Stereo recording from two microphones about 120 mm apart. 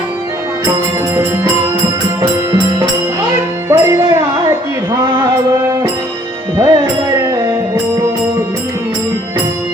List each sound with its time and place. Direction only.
3.7 s music: 25° right (ahead or behind)
4.9 s mantra: 40° right (ahead or behind)
6.6 s speech: 35° right (ahead or behind)
7.2 s music: 25° right (ahead or behind)